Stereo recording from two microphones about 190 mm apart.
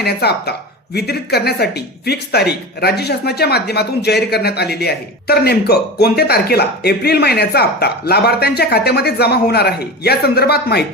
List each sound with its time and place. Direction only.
0.0 s speech: 60° left (ahead or behind)